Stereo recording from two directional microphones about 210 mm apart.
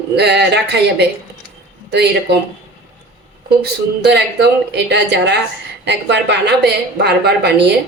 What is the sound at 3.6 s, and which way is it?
A woman's voice, 50° right (ahead or behind).